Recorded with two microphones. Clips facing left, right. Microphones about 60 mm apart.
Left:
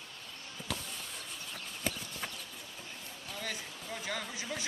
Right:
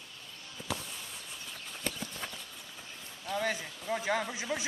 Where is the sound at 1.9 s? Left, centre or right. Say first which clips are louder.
Left 1 dB; centre.